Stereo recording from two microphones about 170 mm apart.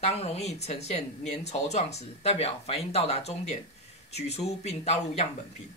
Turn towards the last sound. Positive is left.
turn(degrees=40)  # may be behind; listen again after turning